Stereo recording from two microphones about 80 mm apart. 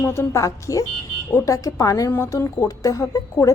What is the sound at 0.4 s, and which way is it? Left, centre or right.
A woman's voice, left.